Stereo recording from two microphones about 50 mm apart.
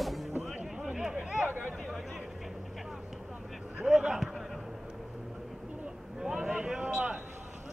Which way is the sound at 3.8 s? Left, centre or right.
Centre.